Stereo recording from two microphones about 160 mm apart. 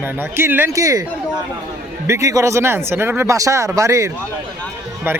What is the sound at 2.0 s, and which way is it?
Speech, 20° right (ahead or behind).